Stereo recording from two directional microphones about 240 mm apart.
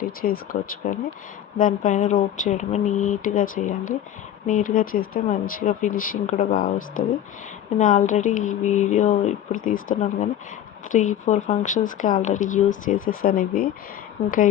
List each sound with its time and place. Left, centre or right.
0.0 s speech: left